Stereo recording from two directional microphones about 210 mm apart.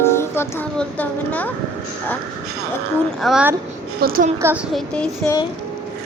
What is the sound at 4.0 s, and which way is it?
Speech, 45° right (ahead or behind).